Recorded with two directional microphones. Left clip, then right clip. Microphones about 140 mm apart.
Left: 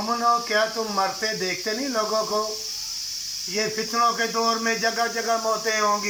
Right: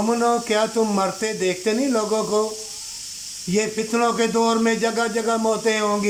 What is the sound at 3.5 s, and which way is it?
Speech, 25° right (ahead or behind).